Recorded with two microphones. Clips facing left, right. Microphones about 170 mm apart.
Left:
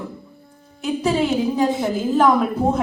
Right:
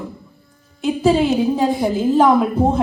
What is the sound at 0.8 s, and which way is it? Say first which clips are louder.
Speech: right 4 dB; 30° right (ahead or behind).